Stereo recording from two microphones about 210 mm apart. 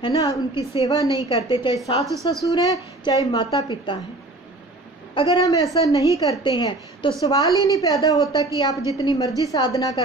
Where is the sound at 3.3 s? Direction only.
30° left (ahead or behind).